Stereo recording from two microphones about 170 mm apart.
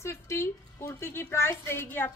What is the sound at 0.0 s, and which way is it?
A woman's voice, 15° left (ahead or behind).